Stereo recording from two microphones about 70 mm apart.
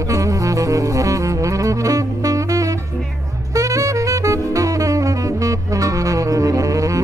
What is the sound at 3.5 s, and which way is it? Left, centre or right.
Saxophone, right.